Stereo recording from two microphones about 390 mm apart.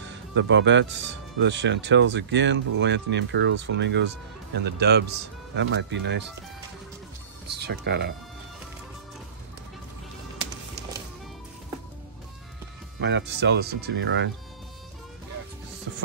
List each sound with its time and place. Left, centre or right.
0.1 s speech: right
7.4 s speech: right
13.0 s speech: right